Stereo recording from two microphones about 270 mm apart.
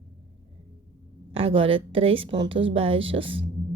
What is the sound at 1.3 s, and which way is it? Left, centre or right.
A woman's voice, right.